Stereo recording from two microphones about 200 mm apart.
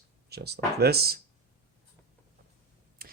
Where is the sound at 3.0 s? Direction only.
45° right (ahead or behind).